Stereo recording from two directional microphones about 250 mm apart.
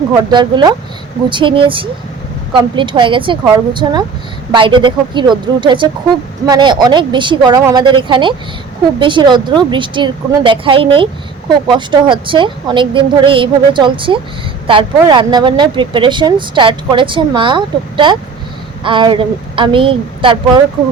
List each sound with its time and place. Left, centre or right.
0.3 s speech: centre